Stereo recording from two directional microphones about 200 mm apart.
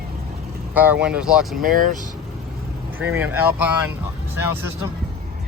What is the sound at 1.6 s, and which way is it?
Speech, 45° right (ahead or behind).